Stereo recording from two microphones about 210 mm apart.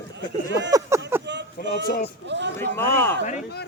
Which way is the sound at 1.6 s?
55° right (ahead or behind).